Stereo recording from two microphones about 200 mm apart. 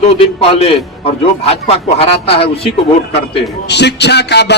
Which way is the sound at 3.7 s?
55° left (ahead or behind).